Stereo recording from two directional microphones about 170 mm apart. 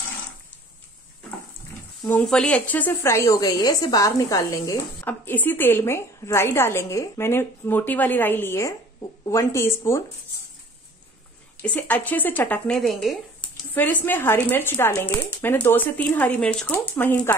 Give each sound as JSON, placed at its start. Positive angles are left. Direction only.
{"t": 2.0, "sound": "speech", "side_deg": 5}
{"t": 11.6, "sound": "speech", "side_deg": 10}